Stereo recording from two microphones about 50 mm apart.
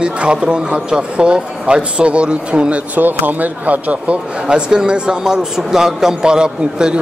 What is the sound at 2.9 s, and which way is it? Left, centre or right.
Speech, right.